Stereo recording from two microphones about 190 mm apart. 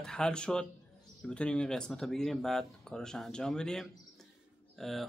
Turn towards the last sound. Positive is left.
turn(degrees=0)  # may be behind; listen again after turning